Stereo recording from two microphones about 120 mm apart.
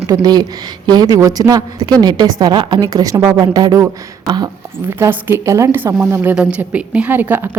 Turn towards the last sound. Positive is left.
turn(degrees=-15)  # may be behind; listen again after turning